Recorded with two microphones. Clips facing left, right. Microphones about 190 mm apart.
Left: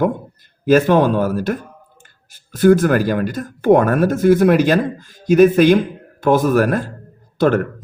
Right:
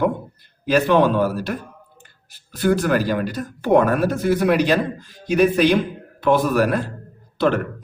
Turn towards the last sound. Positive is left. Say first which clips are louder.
# left 4 dB
turn(degrees=45)  # may be behind; listen again after turning